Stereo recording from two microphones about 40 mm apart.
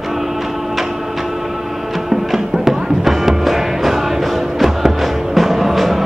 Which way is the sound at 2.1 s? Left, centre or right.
Centre.